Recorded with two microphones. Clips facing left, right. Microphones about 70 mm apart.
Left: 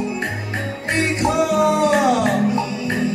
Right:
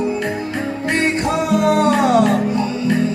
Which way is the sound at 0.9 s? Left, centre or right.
Right.